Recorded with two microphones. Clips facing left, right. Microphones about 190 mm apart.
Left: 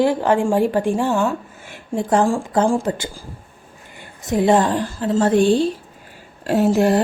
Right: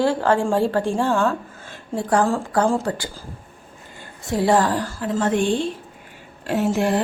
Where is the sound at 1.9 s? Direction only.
20° left (ahead or behind).